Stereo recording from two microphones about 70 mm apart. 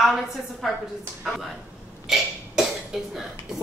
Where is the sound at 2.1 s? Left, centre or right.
Centre.